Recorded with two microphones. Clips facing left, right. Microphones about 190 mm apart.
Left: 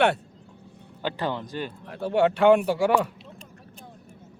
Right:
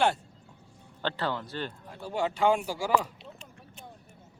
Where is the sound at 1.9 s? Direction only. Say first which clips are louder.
Left 10 dB; 65° left (ahead or behind).